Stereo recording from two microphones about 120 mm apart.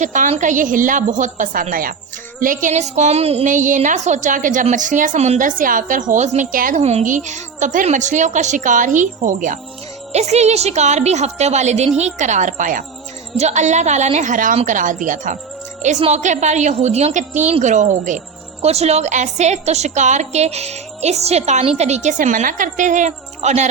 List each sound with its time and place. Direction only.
0.0 s a woman's voice: 90° right
10.1 s a woman's voice: 65° right (ahead or behind); by 12.8 s 90° right
13.3 s a woman's voice: 70° right (ahead or behind); by 15.4 s 90° right
16.0 s a woman's voice: 65° right (ahead or behind); by 18.2 s 90° right
18.6 s a woman's voice: 60° right (ahead or behind)